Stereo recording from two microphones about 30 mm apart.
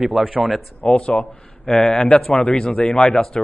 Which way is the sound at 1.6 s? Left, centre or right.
Left.